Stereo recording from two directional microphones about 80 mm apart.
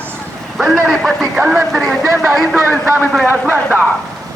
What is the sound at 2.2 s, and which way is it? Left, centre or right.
Speech, right.